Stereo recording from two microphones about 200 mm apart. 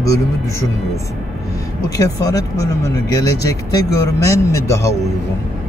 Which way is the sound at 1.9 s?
15° left (ahead or behind).